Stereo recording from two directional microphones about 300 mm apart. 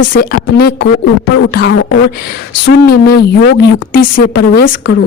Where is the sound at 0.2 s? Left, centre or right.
Left.